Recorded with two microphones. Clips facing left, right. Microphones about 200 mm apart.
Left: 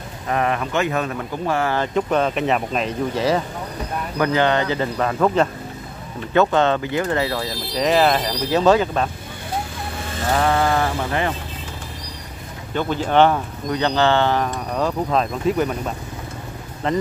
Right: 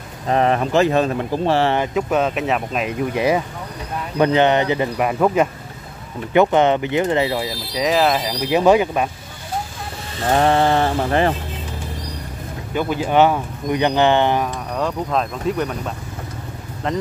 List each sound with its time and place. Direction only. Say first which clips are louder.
0.3 s speech: right 5 dB; 30° right (ahead or behind)
1.8 s speech: right 1 dB; 5° right (ahead or behind)
3.2 s speech: right 2 dB; 15° right (ahead or behind)
7.7 s speech: even; centre (ahead or behind)
8.2 s speech: right 1 dB; 15° right (ahead or behind)
10.3 s speech: right 3 dB; 30° right (ahead or behind)
12.7 s speech: right 1 dB; 10° right (ahead or behind)
14.4 s speech: even; centre (ahead or behind)